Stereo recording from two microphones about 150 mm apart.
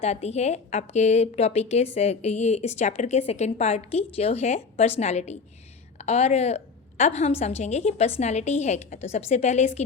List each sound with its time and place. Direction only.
0.0 s a woman's voice: 45° left (ahead or behind)